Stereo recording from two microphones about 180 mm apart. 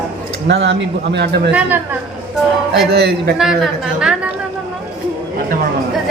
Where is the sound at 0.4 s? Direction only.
75° right (ahead or behind).